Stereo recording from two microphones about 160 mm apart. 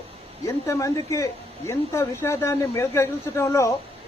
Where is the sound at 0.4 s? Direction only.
20° left (ahead or behind).